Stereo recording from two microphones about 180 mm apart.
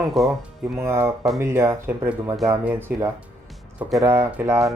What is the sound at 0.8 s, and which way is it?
Speech, 15° right (ahead or behind).